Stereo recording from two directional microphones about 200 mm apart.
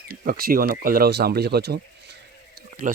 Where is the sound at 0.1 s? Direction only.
45° right (ahead or behind).